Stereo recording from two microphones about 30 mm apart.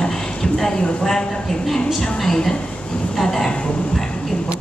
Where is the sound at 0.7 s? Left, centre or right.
Left.